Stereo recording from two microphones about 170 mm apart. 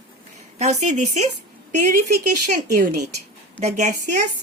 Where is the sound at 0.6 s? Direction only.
40° right (ahead or behind).